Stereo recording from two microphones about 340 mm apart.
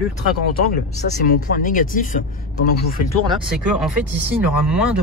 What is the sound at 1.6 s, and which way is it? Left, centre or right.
Speech, left.